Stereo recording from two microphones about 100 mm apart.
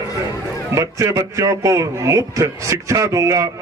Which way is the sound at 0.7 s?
35° right (ahead or behind).